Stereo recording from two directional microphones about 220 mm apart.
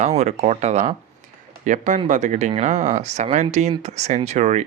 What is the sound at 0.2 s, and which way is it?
Speech, 30° right (ahead or behind).